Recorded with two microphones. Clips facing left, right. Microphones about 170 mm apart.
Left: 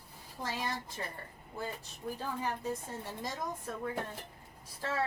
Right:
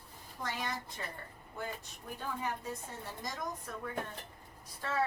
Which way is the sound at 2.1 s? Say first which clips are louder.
Even; 30° left (ahead or behind).